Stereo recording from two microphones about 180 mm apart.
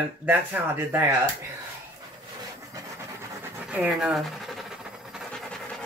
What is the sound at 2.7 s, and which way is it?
Rub, 15° right (ahead or behind).